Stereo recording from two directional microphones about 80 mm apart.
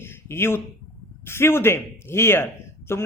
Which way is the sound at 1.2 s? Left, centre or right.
Left.